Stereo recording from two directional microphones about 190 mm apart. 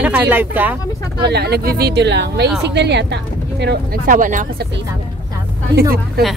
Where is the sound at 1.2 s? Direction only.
60° right (ahead or behind).